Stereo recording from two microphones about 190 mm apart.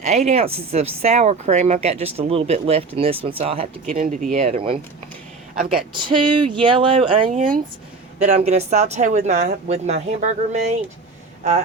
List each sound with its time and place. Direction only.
0.0 s speech: 35° right (ahead or behind)
3.8 s speech: 45° right (ahead or behind)
5.5 s speech: 45° right (ahead or behind)
5.9 s speech: 25° right (ahead or behind)
7.3 s speech: 45° right (ahead or behind)